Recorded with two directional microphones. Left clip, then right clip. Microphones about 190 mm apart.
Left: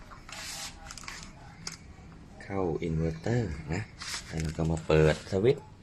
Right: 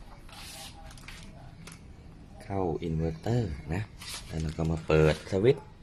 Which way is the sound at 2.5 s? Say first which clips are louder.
Even; 5° right (ahead or behind).